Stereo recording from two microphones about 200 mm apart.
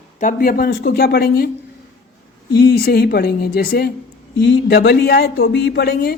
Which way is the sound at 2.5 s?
50° left (ahead or behind).